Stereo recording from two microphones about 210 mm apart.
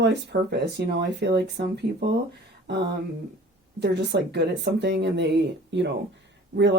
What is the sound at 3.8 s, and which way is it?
Speech, 55° right (ahead or behind).